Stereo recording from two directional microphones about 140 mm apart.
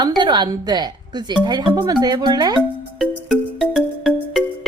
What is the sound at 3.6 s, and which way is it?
Music, centre (ahead or behind).